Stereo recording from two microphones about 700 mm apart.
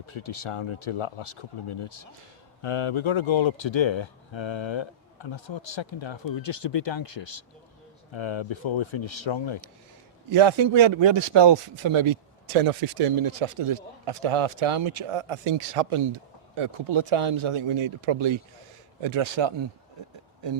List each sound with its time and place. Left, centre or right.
0.0 s speech: left
10.2 s a man's voice: right